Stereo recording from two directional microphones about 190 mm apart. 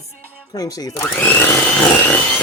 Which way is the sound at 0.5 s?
20° left (ahead or behind).